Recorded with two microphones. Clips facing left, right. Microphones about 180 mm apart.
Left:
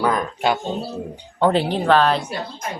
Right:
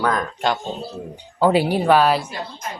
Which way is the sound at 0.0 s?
5° left (ahead or behind).